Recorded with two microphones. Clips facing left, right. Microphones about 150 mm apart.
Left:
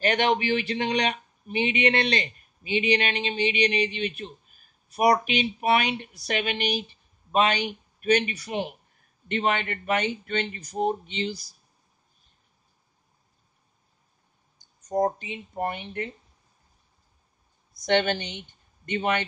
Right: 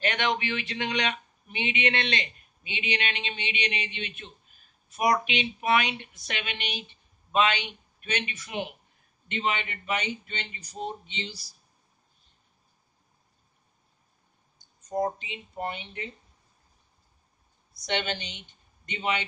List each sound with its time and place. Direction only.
0.0 s speech: 35° left (ahead or behind)
9.3 s speech: 50° left (ahead or behind)
14.6 s speech: 45° left (ahead or behind)
17.8 s speech: 50° left (ahead or behind)